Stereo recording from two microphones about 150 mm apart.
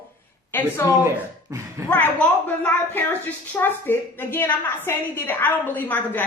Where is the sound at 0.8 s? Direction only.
20° left (ahead or behind).